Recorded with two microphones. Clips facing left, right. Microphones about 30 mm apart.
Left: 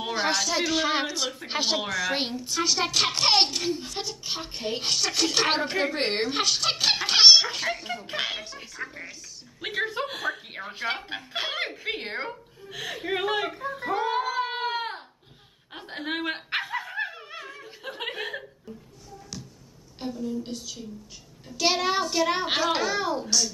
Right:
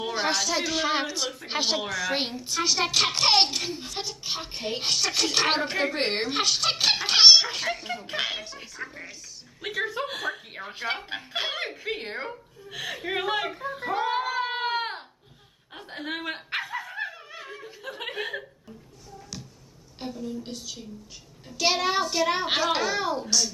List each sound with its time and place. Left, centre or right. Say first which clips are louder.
0.0 s a woman's voice: even; centre
9.6 s speech: left 1 dB; centre
10.0 s a woman's voice: left 1 dB; centre
11.8 s a woman's voice: left 1 dB; centre
12.3 s speech: even; centre
15.7 s a woman's voice: left 2 dB; centre
16.0 s dog: left 3 dB; centre
17.4 s snicker: even; centre
17.6 s chuckle: left 2 dB; centre
19.0 s a sound: even; centre
20.0 s a woman's voice: left 3 dB; centre